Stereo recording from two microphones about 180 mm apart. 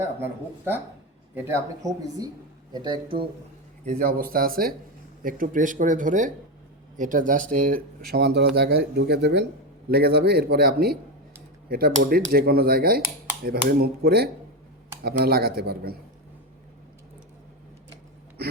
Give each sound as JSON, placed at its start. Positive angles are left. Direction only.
{"t": 0.0, "sound": "speech", "side_deg": -10}
{"t": 3.8, "sound": "speech", "side_deg": -50}
{"t": 8.1, "sound": "speech", "side_deg": -65}